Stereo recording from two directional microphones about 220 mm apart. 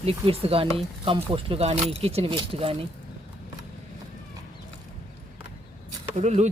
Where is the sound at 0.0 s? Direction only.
25° right (ahead or behind).